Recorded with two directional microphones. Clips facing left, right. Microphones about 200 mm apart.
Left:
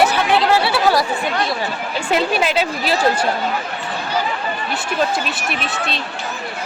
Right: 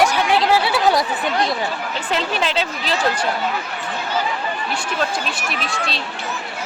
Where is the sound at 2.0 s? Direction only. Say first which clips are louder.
Left 5 dB; 10° left (ahead or behind).